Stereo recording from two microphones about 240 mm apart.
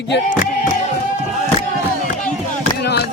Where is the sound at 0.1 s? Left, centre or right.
Left.